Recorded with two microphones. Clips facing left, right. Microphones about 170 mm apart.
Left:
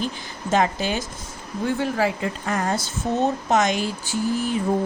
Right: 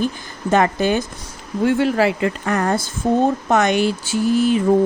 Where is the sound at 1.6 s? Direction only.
75° right (ahead or behind).